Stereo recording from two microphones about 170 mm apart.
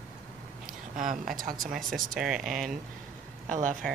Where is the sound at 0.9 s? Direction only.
55° right (ahead or behind).